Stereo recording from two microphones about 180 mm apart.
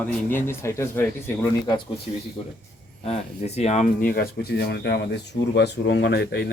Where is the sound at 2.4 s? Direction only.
30° left (ahead or behind); by 6.5 s 60° left (ahead or behind).